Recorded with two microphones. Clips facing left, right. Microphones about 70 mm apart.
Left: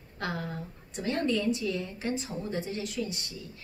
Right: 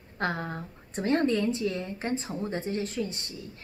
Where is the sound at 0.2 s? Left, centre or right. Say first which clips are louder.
Right 4 dB; right.